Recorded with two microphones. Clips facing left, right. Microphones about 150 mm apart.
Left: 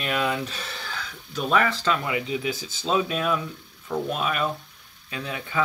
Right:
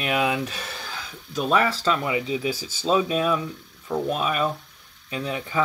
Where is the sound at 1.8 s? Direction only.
25° right (ahead or behind).